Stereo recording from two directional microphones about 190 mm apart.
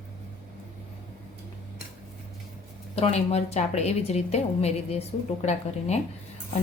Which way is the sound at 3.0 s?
35° left (ahead or behind).